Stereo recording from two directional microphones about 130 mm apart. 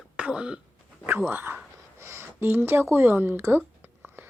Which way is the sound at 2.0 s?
20° right (ahead or behind).